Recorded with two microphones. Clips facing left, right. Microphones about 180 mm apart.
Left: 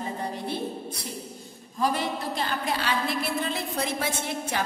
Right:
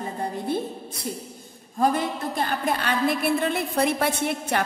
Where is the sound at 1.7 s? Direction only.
50° right (ahead or behind).